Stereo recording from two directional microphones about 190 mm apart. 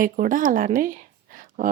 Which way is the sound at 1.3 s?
45° right (ahead or behind).